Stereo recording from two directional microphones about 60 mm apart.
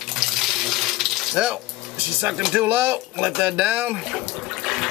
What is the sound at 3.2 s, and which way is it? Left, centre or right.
Speech, centre.